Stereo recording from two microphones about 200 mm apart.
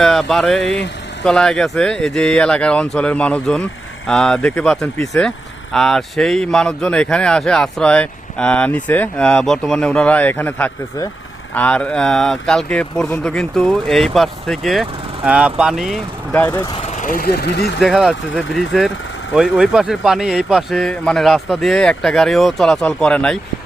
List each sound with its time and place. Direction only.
0.0 s speech: centre (ahead or behind)
16.7 s speech: 35° left (ahead or behind); by 17.7 s 55° left (ahead or behind)
17.7 s speech: centre (ahead or behind)